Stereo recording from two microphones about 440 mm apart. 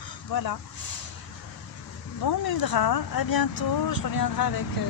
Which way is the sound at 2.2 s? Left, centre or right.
Left.